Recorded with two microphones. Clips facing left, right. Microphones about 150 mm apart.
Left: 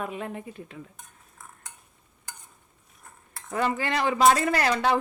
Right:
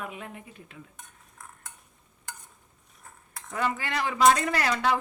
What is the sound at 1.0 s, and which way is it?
Cutlery, centre (ahead or behind).